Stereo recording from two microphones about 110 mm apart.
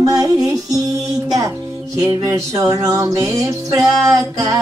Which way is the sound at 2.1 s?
30° right (ahead or behind).